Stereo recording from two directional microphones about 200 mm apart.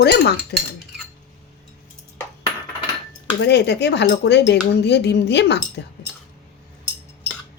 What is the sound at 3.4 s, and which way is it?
Speech, 60° left (ahead or behind).